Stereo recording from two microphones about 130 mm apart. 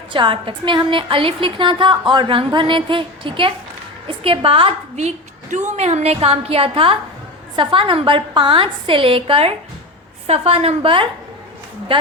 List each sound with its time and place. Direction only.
0.1 s a woman's voice: 40° right (ahead or behind)
4.9 s a woman's voice: 65° right (ahead or behind); by 11.1 s 45° right (ahead or behind)